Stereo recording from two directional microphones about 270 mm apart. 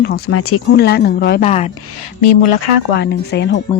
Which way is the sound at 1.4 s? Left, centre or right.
Left.